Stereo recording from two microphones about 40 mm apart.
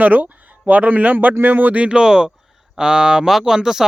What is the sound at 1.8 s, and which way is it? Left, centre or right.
Speech, centre.